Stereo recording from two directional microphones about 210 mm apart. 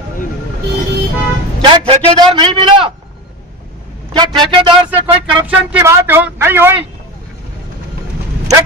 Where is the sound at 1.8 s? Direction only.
25° right (ahead or behind).